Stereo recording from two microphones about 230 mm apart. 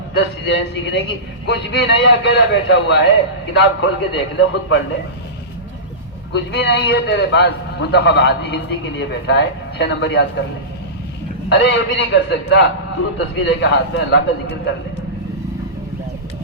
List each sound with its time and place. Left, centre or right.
0.1 s a man's voice: left
6.3 s a man's voice: left
11.4 s a man's voice: left